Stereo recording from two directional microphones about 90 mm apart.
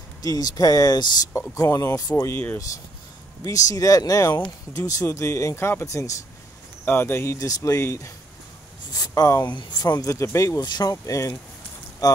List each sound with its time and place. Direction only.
0.2 s speech: 40° left (ahead or behind)
1.5 s speech: 35° left (ahead or behind)
2.1 s speech: 25° left (ahead or behind)
3.4 s speech: 40° left (ahead or behind)
6.8 s speech: 25° left (ahead or behind)
7.3 s speech: 35° left (ahead or behind)
8.9 s speech: 45° left (ahead or behind)
10.1 s speech: 35° left (ahead or behind)
10.6 s speech: 50° left (ahead or behind)